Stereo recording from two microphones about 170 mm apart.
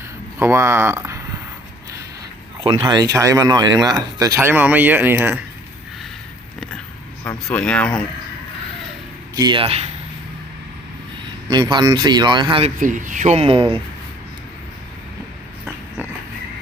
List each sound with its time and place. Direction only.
0.3 s speech: 15° right (ahead or behind)
2.6 s speech: 25° right (ahead or behind); by 5.3 s 10° right (ahead or behind)
7.3 s speech: 5° left (ahead or behind)
9.3 s speech: 25° right (ahead or behind)
11.4 s speech: 25° right (ahead or behind)
12.8 s speech: 50° right (ahead or behind); by 13.7 s 35° right (ahead or behind)